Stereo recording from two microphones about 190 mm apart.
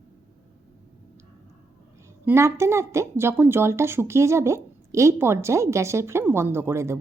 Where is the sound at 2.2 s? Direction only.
15° right (ahead or behind).